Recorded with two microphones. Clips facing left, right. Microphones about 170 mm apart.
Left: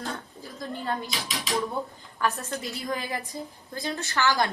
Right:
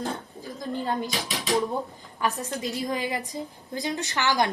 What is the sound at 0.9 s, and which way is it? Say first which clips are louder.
A woman's voice: right 1 dB; 20° right (ahead or behind).